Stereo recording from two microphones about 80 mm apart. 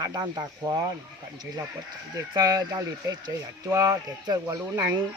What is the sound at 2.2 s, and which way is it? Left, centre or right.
Speech, right.